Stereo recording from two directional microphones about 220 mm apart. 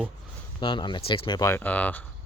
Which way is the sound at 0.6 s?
20° left (ahead or behind).